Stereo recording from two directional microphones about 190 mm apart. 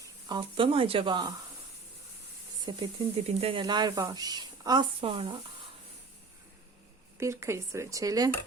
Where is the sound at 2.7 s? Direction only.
25° right (ahead or behind).